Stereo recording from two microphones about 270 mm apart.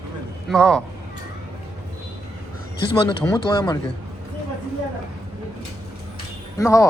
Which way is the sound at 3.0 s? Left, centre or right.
Centre.